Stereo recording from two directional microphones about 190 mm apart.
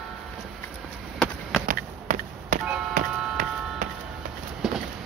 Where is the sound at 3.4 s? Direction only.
45° right (ahead or behind).